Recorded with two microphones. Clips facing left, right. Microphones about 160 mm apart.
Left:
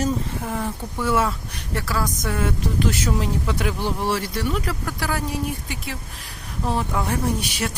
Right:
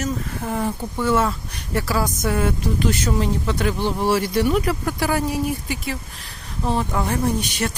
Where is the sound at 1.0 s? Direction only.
5° left (ahead or behind).